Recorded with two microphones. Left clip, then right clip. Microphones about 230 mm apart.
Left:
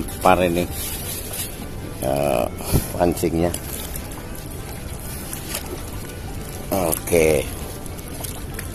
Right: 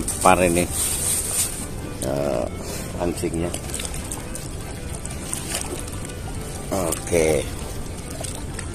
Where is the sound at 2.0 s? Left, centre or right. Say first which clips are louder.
Left 4 dB; centre.